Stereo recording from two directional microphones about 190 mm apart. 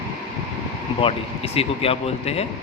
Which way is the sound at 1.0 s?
30° left (ahead or behind).